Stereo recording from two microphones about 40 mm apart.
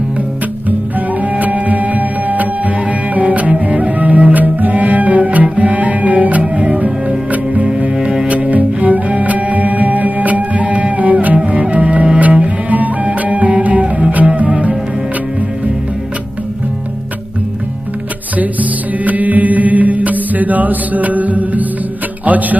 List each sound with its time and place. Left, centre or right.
0.9 s music: right
12.2 s cello: right
12.7 s music: right
18.3 s music: right